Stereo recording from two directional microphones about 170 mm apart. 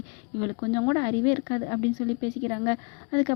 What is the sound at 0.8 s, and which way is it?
Speech, 25° left (ahead or behind).